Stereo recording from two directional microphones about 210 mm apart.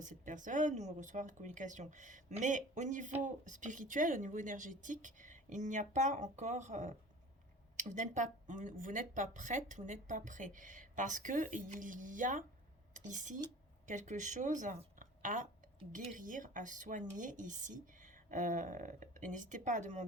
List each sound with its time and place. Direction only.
0.0 s a woman's voice: 35° right (ahead or behind)